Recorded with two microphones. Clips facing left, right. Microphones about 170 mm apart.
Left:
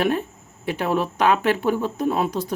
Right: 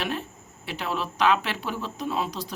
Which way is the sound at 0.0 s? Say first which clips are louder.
Left 9 dB; 50° left (ahead or behind).